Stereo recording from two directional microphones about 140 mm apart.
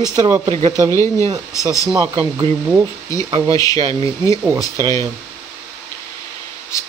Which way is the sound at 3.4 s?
25° left (ahead or behind).